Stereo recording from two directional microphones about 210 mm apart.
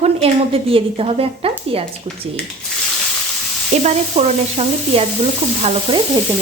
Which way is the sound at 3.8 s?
30° right (ahead or behind).